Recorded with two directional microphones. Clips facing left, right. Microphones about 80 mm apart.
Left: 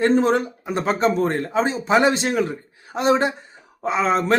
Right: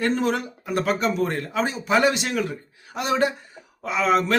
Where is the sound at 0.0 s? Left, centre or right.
Left.